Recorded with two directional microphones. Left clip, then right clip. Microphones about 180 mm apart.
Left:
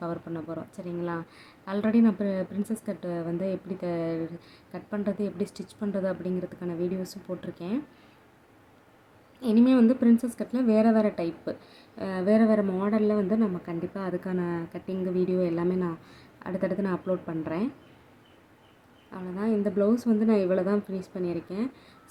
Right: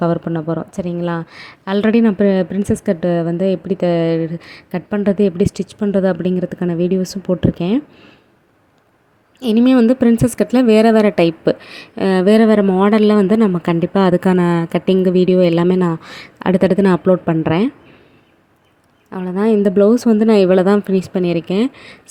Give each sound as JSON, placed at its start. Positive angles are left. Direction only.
{"t": 0.0, "sound": "a woman's voice", "side_deg": -45}
{"t": 9.4, "sound": "a woman's voice", "side_deg": -45}
{"t": 19.1, "sound": "a woman's voice", "side_deg": -50}